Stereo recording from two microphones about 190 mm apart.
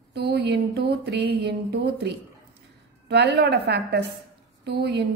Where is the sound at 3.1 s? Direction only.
65° right (ahead or behind).